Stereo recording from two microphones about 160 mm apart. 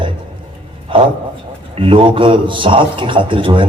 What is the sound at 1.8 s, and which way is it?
A man's voice, 30° right (ahead or behind).